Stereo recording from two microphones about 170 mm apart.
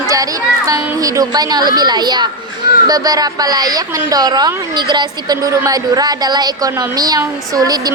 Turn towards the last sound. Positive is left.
turn(degrees=-20)  # may be behind; listen again after turning